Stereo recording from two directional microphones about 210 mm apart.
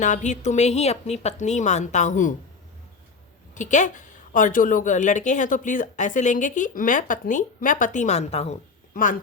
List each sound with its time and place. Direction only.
0.0 s a woman's voice: 35° left (ahead or behind)
3.5 s a woman's voice: 35° left (ahead or behind)